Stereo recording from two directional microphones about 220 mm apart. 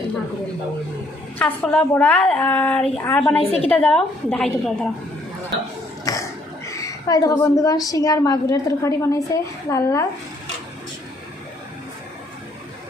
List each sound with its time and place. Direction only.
1.4 s a woman's voice: 5° left (ahead or behind)
3.4 s a woman's voice: 30° left (ahead or behind)
3.7 s a woman's voice: 5° left (ahead or behind)
6.1 s a sound: 15° left (ahead or behind)
6.7 s a woman's voice: 15° left (ahead or behind)